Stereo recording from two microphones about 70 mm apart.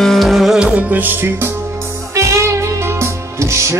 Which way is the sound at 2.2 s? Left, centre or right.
Right.